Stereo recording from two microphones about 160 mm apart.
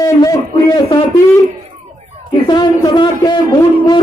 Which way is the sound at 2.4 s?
30° left (ahead or behind).